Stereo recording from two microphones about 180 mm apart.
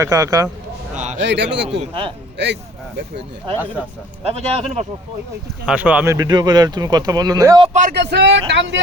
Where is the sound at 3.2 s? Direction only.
30° right (ahead or behind).